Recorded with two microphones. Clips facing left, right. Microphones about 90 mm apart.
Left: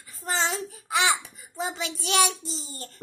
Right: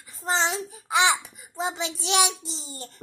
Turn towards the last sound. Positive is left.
turn(degrees=-20)  # may be behind; listen again after turning